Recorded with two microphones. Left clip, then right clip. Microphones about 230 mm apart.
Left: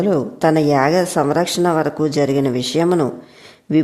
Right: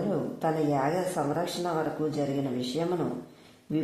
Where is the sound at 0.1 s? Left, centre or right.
Left.